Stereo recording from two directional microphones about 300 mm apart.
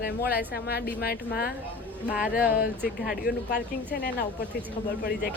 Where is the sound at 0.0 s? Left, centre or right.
Left.